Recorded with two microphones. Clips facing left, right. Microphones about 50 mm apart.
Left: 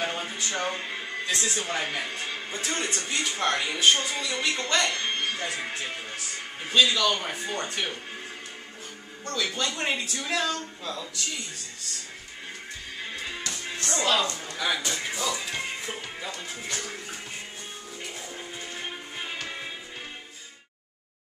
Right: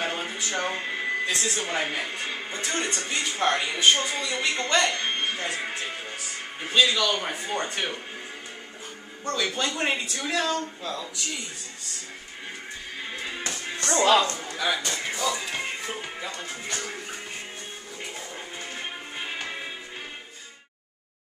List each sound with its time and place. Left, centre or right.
0.0 s a sound: centre
1.2 s speech: centre
6.7 s speech: centre
9.2 s speech: centre
13.9 s speech: right
14.5 s a man's voice: centre
18.8 s music: centre